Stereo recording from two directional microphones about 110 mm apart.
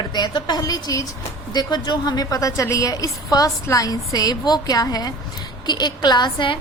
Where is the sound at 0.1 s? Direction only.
40° left (ahead or behind).